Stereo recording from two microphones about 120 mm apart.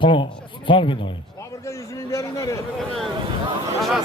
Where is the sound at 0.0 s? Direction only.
45° left (ahead or behind).